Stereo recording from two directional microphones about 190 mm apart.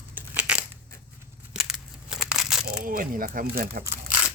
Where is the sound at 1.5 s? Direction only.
Centre (ahead or behind).